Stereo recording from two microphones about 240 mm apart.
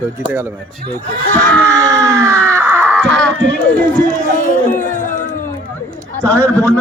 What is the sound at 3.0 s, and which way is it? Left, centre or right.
A man's voice, centre.